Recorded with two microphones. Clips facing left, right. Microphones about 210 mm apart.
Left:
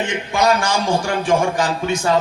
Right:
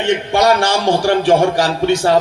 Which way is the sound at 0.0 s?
35° right (ahead or behind).